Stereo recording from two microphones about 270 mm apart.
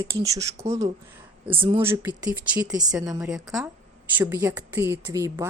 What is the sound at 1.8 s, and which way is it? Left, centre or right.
A woman's voice, centre.